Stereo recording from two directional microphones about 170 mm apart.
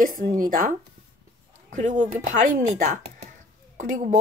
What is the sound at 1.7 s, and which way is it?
Speech, 45° right (ahead or behind).